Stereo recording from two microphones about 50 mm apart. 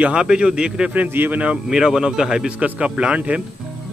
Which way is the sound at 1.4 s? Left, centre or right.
Centre.